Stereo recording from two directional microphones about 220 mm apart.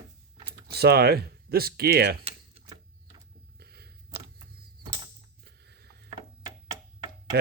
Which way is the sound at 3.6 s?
45° right (ahead or behind).